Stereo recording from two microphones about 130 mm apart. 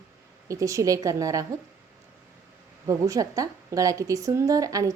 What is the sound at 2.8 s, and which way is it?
A woman's voice, 25° right (ahead or behind).